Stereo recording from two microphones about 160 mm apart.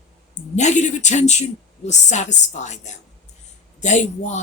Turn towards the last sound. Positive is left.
turn(degrees=45)  # may be behind; listen again after turning